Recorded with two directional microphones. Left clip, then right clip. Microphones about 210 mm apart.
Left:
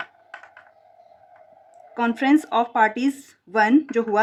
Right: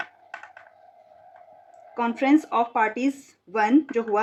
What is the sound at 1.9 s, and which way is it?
Speech, 45° left (ahead or behind).